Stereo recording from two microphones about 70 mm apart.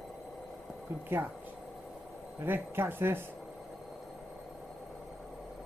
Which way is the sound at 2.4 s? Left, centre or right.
Right.